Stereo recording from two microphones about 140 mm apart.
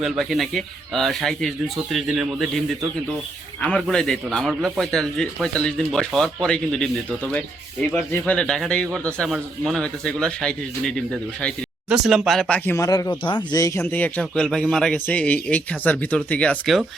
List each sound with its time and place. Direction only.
0.0 s speech: centre (ahead or behind)
3.6 s speech: 5° left (ahead or behind); by 13.8 s 25° left (ahead or behind)
13.9 s speech: 10° left (ahead or behind)